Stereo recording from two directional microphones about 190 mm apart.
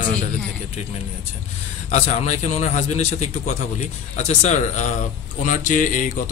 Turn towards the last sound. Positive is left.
turn(degrees=45)  # may be behind; listen again after turning